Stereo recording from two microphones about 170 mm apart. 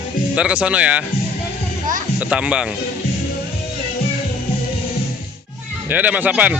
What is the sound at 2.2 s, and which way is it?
Speech, 5° right (ahead or behind).